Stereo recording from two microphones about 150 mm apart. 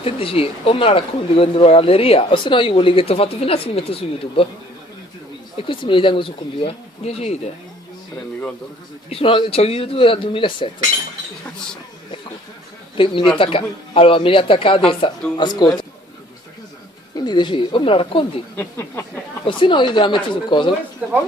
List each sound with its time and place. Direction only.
0.0 s speech: 40° left (ahead or behind)
5.6 s speech: 35° left (ahead or behind)
9.1 s speech: 35° left (ahead or behind)
12.9 s speech: 35° left (ahead or behind)
17.1 s speech: 30° left (ahead or behind)
18.6 s a sound: 10° left (ahead or behind)
19.4 s speech: 35° left (ahead or behind)
21.0 s speech: 10° right (ahead or behind)